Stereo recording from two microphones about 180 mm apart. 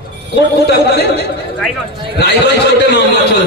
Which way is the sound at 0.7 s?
65° left (ahead or behind).